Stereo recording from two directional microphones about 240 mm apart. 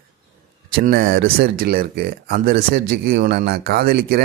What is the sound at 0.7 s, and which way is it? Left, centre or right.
Speech, right.